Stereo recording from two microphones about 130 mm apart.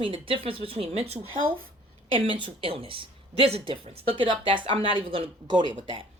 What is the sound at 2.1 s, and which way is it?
Speech, 40° right (ahead or behind).